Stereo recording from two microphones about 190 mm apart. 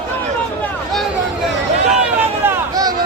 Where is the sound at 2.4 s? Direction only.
20° right (ahead or behind).